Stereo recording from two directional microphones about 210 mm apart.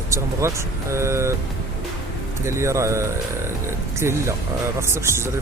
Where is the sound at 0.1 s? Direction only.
15° right (ahead or behind).